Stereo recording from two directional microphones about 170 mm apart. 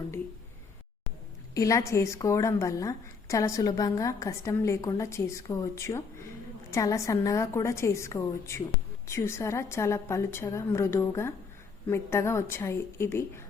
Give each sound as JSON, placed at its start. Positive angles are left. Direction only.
{"t": 1.5, "sound": "a woman's voice", "side_deg": 20}